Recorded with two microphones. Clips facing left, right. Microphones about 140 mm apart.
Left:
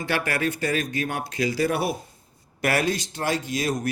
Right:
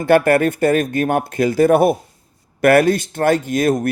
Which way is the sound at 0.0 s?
50° right (ahead or behind).